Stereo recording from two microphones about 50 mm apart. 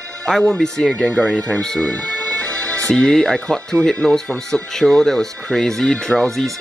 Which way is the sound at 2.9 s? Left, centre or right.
Centre.